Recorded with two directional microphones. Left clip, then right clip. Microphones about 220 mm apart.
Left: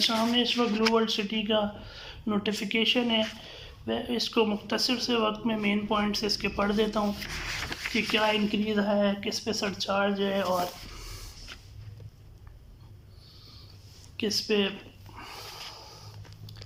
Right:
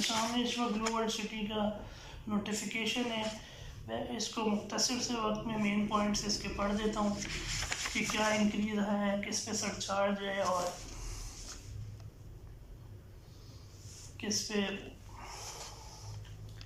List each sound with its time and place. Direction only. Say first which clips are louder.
0.0 s speech: left 8 dB; 40° left (ahead or behind)
14.2 s speech: left 9 dB; 45° left (ahead or behind)
15.2 s a sound: left 5 dB; 50° left (ahead or behind)